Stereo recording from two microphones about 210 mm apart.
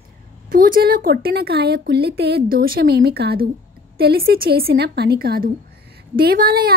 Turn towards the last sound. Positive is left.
turn(degrees=-45)  # may be behind; listen again after turning